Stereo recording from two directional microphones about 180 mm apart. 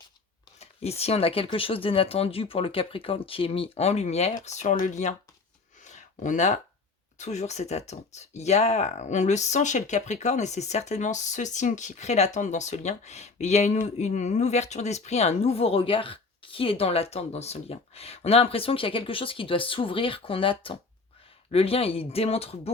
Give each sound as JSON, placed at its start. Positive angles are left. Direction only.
{"t": 0.6, "sound": "speech", "side_deg": 35}
{"t": 5.8, "sound": "a sound", "side_deg": 40}
{"t": 7.2, "sound": "speech", "side_deg": 40}